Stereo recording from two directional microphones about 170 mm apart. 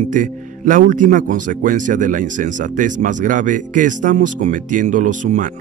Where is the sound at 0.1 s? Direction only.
50° right (ahead or behind).